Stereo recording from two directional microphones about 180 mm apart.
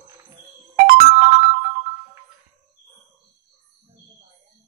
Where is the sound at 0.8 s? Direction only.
55° right (ahead or behind).